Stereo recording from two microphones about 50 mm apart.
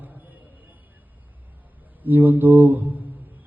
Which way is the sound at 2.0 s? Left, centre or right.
Right.